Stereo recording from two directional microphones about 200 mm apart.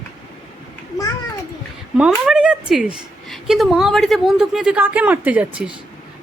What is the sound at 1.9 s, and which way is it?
A woman's voice, 5° right (ahead or behind).